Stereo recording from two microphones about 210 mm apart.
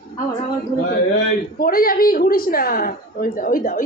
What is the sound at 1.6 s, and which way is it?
A woman's voice, 45° left (ahead or behind).